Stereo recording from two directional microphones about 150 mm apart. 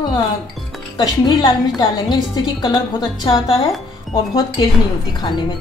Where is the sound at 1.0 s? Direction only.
30° left (ahead or behind).